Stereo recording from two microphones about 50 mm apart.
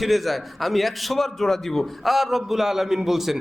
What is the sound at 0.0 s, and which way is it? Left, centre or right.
A man's voice, centre.